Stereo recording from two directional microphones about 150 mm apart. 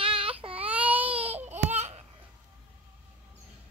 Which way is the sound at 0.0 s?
35° right (ahead or behind).